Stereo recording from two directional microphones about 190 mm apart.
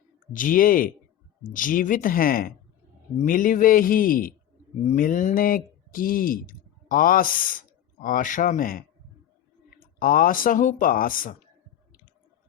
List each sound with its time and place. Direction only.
0.3 s a man's voice: 45° left (ahead or behind)